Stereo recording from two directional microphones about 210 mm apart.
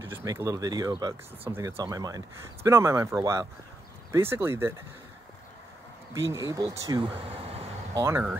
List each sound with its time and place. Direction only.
0.0 s speech: 15° right (ahead or behind)
6.5 s speech: 15° right (ahead or behind)
8.0 s speech: 10° right (ahead or behind)